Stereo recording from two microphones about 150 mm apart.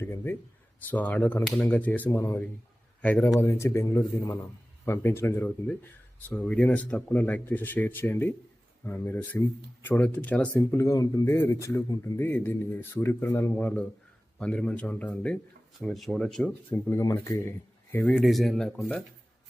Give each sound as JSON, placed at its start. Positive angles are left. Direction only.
{"t": 0.0, "sound": "a man's voice", "side_deg": 15}
{"t": 16.7, "sound": "a man's voice", "side_deg": 25}
{"t": 18.0, "sound": "speech", "side_deg": 0}